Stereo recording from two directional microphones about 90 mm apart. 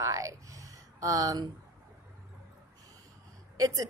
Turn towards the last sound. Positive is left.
turn(degrees=-40)  # may be behind; listen again after turning